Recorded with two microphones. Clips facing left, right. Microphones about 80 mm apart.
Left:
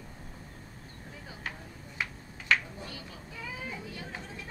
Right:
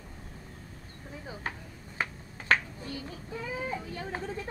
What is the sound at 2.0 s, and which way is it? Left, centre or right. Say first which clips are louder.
Finger snapping: right 3 dB; right.